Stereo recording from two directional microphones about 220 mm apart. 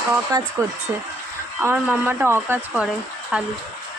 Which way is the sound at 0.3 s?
20° right (ahead or behind).